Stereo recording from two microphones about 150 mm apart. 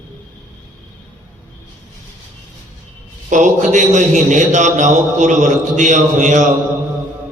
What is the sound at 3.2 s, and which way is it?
A man's voice, 55° right (ahead or behind).